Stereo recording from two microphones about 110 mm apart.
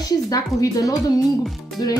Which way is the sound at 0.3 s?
30° left (ahead or behind).